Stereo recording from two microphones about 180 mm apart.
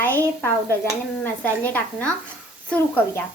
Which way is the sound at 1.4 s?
10° left (ahead or behind).